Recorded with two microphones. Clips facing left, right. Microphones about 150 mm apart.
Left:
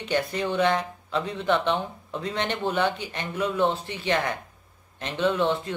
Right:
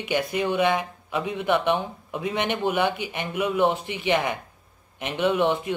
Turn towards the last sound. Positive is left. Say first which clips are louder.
# right 2 dB
turn(degrees=-15)  # may be behind; listen again after turning